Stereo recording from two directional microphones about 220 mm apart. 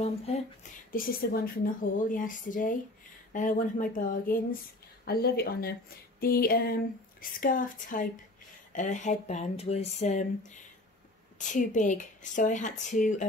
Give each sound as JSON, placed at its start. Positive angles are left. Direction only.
{"t": 0.9, "sound": "speech", "side_deg": 40}